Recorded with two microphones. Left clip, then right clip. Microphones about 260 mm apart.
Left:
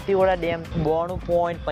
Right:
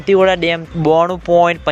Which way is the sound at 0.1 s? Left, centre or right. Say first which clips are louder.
Right 8 dB; right.